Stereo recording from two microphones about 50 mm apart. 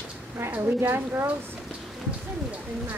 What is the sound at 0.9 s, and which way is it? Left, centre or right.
Speech, right.